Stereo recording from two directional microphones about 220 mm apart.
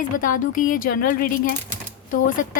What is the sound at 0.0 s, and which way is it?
A woman's voice, 35° left (ahead or behind).